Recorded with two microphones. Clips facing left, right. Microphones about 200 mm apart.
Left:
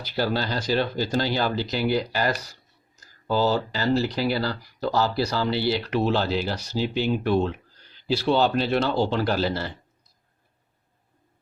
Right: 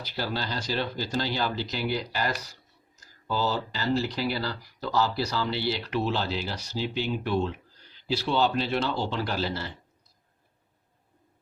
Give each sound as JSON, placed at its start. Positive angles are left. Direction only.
{"t": 0.2, "sound": "speech", "side_deg": 55}
{"t": 5.5, "sound": "speech", "side_deg": 5}
{"t": 5.9, "sound": "speech", "side_deg": 55}
{"t": 6.7, "sound": "speech", "side_deg": 5}
{"t": 7.1, "sound": "speech", "side_deg": 50}
{"t": 8.1, "sound": "speech", "side_deg": 35}